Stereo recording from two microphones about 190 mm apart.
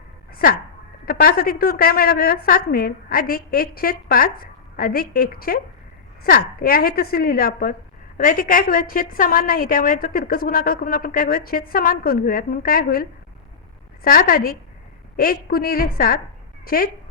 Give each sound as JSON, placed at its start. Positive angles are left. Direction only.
{"t": 1.0, "sound": "a woman's voice", "side_deg": 50}